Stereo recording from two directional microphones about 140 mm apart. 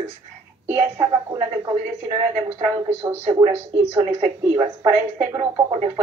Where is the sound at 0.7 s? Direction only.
15° right (ahead or behind).